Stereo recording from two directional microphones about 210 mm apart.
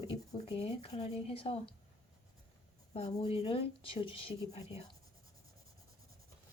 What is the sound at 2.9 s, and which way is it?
Speech, 30° left (ahead or behind).